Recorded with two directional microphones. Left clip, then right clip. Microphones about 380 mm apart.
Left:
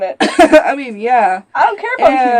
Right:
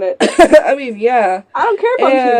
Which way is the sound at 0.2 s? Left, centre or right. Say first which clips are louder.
Even; centre.